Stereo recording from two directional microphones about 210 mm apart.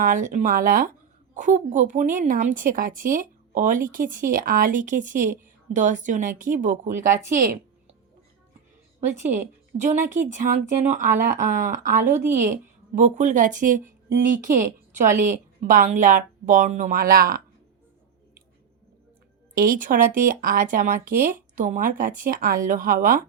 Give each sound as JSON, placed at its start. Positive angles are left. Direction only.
{"t": 0.0, "sound": "a woman's voice", "side_deg": -40}
{"t": 9.7, "sound": "a woman's voice", "side_deg": -35}
{"t": 12.0, "sound": "a woman's voice", "side_deg": -10}
{"t": 13.0, "sound": "a woman's voice", "side_deg": -35}
{"t": 19.5, "sound": "a woman's voice", "side_deg": -40}